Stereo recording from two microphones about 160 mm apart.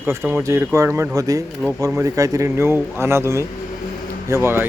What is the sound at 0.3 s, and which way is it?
Speech, 15° right (ahead or behind).